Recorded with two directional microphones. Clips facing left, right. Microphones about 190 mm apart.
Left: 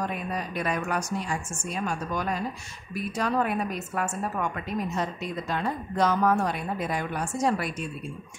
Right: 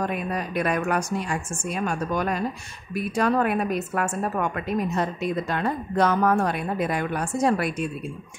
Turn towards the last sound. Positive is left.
turn(degrees=-60)  # may be behind; listen again after turning